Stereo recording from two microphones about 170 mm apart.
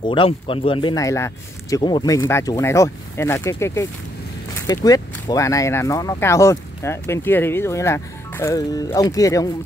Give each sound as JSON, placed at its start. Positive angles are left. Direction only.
{"t": 0.0, "sound": "speech", "side_deg": 30}